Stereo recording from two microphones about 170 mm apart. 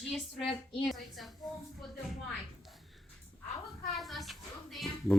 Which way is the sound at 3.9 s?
Centre (ahead or behind).